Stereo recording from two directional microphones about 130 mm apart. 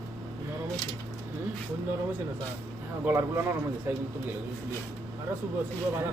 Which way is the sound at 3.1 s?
20° right (ahead or behind).